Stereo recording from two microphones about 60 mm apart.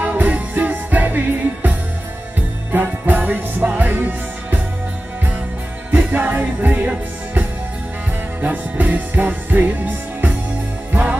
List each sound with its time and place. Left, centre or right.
0.0 s music: right
5.9 s music: right